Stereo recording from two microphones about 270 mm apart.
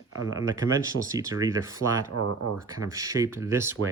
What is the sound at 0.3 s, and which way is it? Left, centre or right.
Speech, centre.